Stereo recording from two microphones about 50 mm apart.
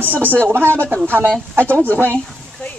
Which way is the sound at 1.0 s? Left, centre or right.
Right.